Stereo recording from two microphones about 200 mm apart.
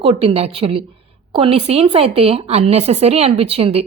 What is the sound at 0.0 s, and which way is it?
Speech, 30° right (ahead or behind).